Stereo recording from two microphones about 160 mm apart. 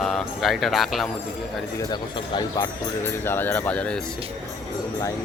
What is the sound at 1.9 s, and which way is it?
Speech, 25° left (ahead or behind).